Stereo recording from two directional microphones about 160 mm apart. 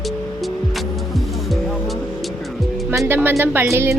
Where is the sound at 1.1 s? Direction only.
Centre (ahead or behind).